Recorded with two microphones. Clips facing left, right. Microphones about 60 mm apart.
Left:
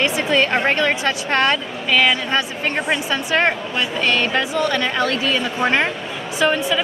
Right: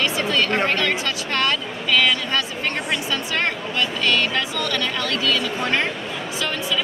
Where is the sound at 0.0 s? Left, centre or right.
Left.